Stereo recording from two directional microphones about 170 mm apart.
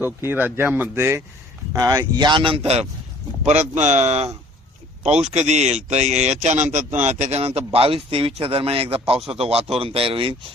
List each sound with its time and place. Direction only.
0.0 s a man's voice: 10° right (ahead or behind); by 10.3 s 30° right (ahead or behind)